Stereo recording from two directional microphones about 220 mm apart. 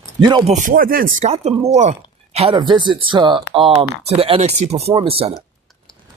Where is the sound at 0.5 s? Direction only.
40° right (ahead or behind).